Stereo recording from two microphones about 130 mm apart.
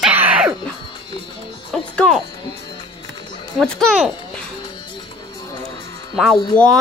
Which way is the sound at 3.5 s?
5° left (ahead or behind).